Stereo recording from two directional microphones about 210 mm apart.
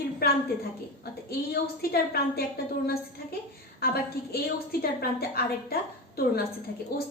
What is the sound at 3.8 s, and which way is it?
A woman's voice, 45° left (ahead or behind).